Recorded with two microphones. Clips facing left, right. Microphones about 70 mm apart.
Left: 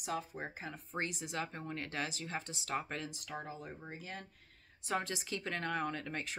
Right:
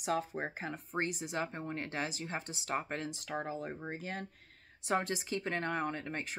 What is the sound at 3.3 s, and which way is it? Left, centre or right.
Speech, right.